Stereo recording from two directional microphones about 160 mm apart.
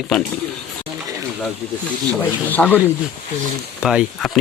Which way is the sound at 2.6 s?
5° left (ahead or behind).